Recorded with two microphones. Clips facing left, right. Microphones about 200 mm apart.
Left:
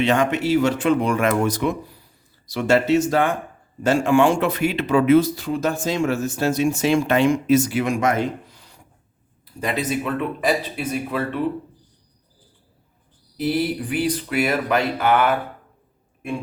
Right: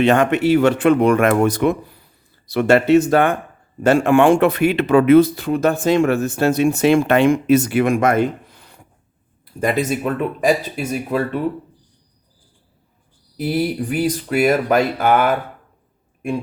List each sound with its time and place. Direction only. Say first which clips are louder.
0.0 s speech: right 5 dB; 55° right (ahead or behind)
13.3 s speech: right 2 dB; 45° right (ahead or behind)